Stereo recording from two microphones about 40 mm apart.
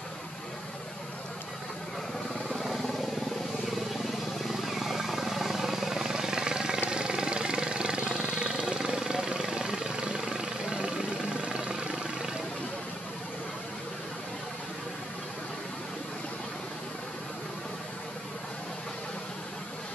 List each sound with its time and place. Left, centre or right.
2.6 s helicopter: centre
4.0 s helicopter: centre
6.9 s vehicle: right
10.8 s helicopter: right